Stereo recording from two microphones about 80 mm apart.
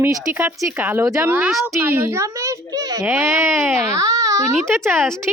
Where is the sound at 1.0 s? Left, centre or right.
Right.